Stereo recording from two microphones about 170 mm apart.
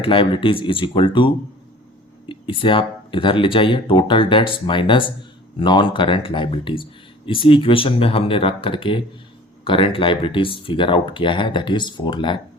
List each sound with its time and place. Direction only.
0.0 s speech: 30° left (ahead or behind)
2.3 s speech: 30° left (ahead or behind)